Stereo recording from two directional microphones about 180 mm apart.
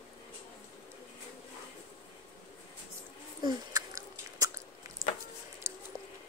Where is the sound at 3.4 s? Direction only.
20° right (ahead or behind).